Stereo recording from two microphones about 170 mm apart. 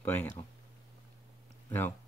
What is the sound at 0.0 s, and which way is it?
Speech, 10° left (ahead or behind).